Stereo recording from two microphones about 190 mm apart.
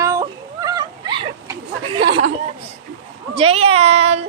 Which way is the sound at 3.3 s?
30° right (ahead or behind).